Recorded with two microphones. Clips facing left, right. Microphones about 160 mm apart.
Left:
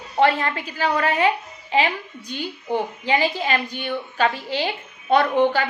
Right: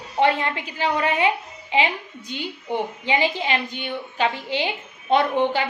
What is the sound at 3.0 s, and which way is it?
A woman's voice, 20° right (ahead or behind).